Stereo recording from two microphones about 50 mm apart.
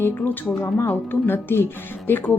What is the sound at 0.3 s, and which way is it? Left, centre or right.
Speech, left.